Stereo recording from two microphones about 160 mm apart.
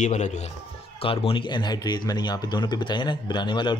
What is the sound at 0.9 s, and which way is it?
Speech, 35° left (ahead or behind).